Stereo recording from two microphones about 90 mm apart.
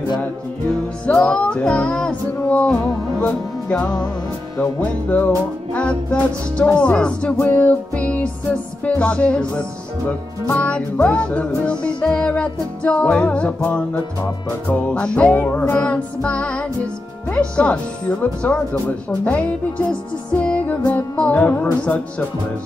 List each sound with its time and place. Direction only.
1.0 s music: 10° left (ahead or behind)